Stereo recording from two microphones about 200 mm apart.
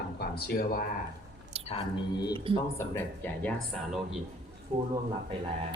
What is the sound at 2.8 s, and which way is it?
Speech, 10° left (ahead or behind).